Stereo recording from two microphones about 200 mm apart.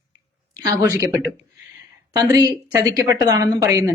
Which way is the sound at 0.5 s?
20° right (ahead or behind).